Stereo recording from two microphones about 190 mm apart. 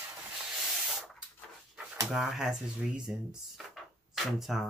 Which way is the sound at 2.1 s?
Centre (ahead or behind).